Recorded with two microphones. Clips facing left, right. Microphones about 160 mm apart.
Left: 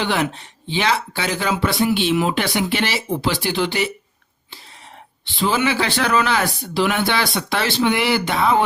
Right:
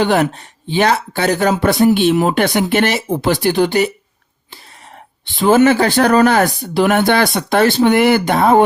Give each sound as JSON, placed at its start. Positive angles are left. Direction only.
{"t": 0.0, "sound": "speech", "side_deg": -45}
{"t": 5.4, "sound": "speech", "side_deg": -50}